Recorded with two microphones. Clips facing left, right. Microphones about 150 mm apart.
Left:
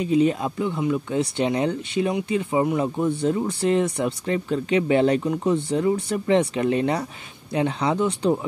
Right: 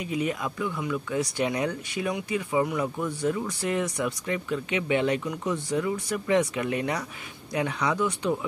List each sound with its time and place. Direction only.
0.0 s speech: 30° left (ahead or behind)